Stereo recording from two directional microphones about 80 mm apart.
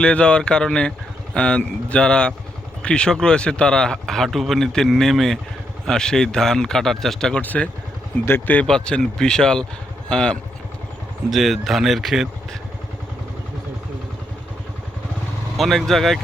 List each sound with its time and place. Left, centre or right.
0.0 s speech: centre
7.4 s speech: centre
8.6 s speech: centre
11.3 s speech: centre
15.5 s speech: centre